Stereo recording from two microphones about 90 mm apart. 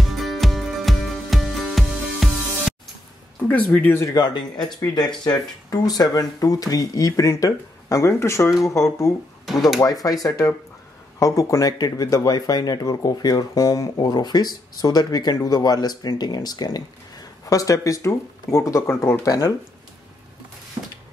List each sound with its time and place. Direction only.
0.1 s music: centre (ahead or behind)
3.4 s speech: 15° left (ahead or behind)
4.1 s speech: 55° left (ahead or behind); by 9.1 s 40° left (ahead or behind)
9.5 s speech: centre (ahead or behind)
9.8 s speech: 40° left (ahead or behind)
19.2 s speech: 40° left (ahead or behind)